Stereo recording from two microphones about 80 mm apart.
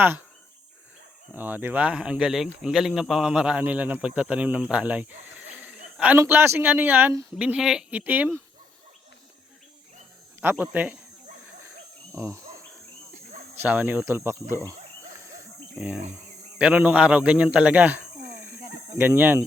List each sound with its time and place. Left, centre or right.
1.3 s speech: right
5.5 s a sound: centre
6.1 s speech: right
7.3 s speech: centre
10.4 s speech: right
12.1 s speech: right
13.7 s speech: centre
13.9 s speech: right
15.8 s speech: centre; by 19.4 s right